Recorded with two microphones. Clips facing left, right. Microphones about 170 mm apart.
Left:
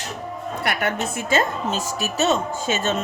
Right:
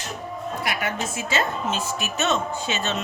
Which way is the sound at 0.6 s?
60° left (ahead or behind).